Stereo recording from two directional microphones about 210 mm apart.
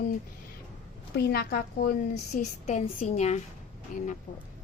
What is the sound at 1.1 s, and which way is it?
Speech, 50° left (ahead or behind).